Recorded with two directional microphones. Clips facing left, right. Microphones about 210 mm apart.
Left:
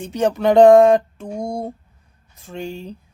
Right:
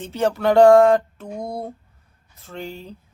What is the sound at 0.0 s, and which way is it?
Speech, 15° left (ahead or behind).